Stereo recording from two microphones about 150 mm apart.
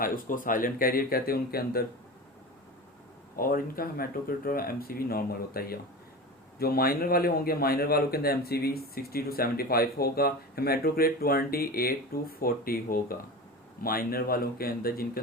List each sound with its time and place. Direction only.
0.0 s speech: 65° left (ahead or behind); by 1.8 s 90° left
3.3 s speech: 75° left (ahead or behind)